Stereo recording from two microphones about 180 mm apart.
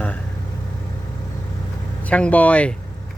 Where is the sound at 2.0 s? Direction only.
5° left (ahead or behind).